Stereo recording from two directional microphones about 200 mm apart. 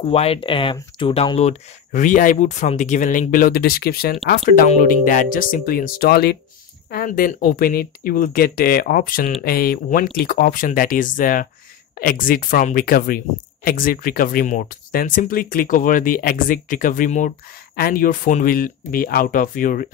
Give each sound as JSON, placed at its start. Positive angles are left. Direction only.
{"t": 0.0, "sound": "speech", "side_deg": 30}